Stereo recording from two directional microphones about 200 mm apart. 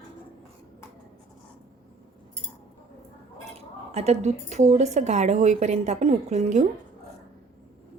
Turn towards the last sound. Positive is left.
turn(degrees=-35)  # may be behind; listen again after turning